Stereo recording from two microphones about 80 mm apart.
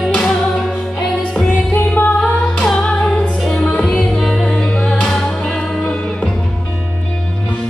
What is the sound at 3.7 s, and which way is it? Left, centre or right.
Music, centre.